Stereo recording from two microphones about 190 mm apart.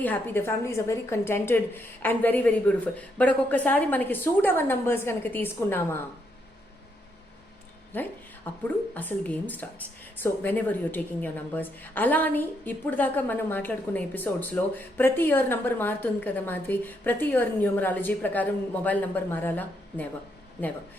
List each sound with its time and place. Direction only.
0.0 s a woman's voice: 10° left (ahead or behind)
7.9 s a woman's voice: 10° left (ahead or behind)